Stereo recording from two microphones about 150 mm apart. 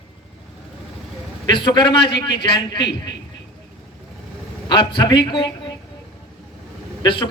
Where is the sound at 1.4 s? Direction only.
30° left (ahead or behind).